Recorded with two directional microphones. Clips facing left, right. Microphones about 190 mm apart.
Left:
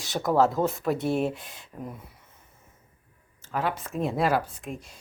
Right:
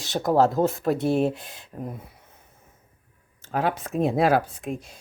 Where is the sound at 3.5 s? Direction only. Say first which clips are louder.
Right 4 dB; 40° right (ahead or behind).